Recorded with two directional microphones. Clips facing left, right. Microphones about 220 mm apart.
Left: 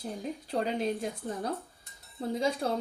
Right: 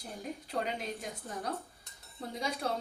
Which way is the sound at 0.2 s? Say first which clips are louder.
Left 3 dB; 30° left (ahead or behind).